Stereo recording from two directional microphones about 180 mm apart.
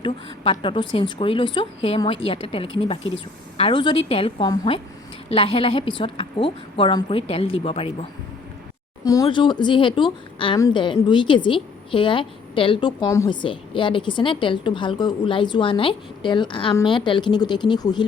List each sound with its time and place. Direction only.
0.0 s a woman's voice: 25° left (ahead or behind)
9.0 s a woman's voice: 25° left (ahead or behind)